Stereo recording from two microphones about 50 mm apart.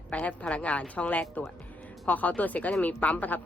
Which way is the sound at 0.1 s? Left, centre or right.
Left.